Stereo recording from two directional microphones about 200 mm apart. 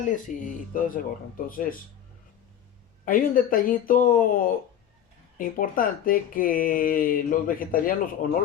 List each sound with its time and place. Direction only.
0.0 s speech: 40° left (ahead or behind)
3.1 s speech: 45° left (ahead or behind)